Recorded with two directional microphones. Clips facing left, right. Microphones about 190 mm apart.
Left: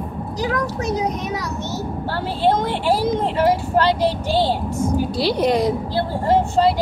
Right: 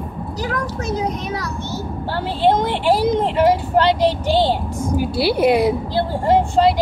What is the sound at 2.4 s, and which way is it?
Speech, 15° right (ahead or behind).